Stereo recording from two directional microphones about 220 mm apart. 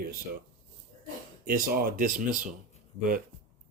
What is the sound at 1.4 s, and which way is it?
Speech, 40° right (ahead or behind).